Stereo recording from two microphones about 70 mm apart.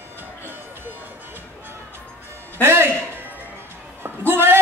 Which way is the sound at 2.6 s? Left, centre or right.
Right.